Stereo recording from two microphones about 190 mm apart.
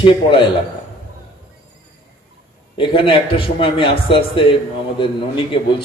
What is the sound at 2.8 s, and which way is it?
A man's voice, 25° left (ahead or behind).